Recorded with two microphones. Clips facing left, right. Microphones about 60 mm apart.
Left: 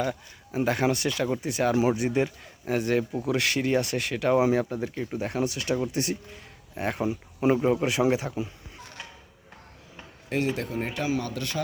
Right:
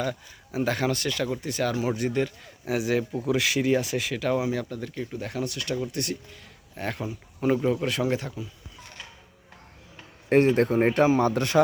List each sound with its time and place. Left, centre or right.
0.0 s speech: centre
2.6 s speech: centre
4.4 s speech: left; by 8.3 s centre
10.2 s a man's voice: right